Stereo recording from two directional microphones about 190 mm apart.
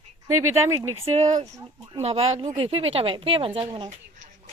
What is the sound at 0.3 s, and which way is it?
Speech, 15° right (ahead or behind).